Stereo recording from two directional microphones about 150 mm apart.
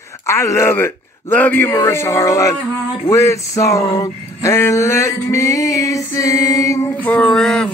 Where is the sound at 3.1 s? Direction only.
20° left (ahead or behind); by 7.6 s 5° left (ahead or behind).